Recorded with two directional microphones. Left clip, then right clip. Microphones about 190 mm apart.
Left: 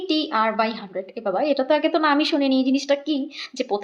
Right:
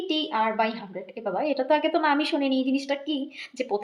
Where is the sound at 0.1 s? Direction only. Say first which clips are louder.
Left 4 dB; 30° left (ahead or behind).